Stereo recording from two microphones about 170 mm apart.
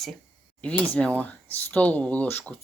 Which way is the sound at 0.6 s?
5° left (ahead or behind).